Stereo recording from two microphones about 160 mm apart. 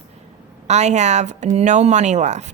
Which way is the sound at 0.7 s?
45° right (ahead or behind).